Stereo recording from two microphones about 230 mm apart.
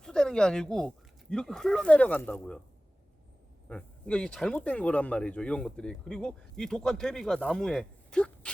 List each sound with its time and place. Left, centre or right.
0.0 s speech: centre
3.7 s speech: centre